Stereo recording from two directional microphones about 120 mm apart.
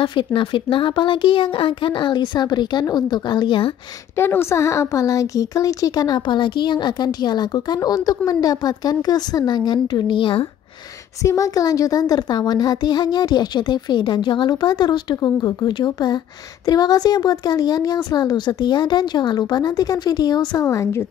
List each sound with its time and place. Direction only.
0.0 s a woman's voice: 45° left (ahead or behind)
4.2 s a woman's voice: 20° left (ahead or behind); by 10.4 s 45° left (ahead or behind)
11.2 s a woman's voice: 25° left (ahead or behind)